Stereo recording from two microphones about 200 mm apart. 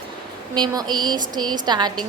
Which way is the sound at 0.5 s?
20° right (ahead or behind).